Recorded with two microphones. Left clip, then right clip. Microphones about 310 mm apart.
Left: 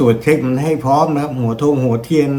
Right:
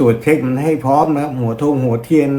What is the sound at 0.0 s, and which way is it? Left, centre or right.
A man's voice, centre.